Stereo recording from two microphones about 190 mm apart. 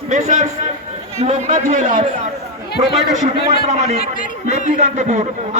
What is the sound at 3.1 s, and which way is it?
A man's voice, 40° right (ahead or behind).